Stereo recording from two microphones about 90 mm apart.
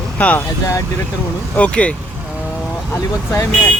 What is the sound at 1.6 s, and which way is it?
Speech, 15° left (ahead or behind).